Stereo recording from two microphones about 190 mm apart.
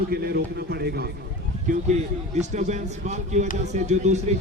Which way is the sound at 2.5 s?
40° right (ahead or behind).